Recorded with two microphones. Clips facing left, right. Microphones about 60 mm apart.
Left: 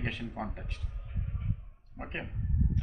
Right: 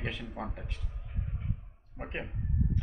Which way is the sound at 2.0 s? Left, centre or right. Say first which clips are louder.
Right 1 dB; centre.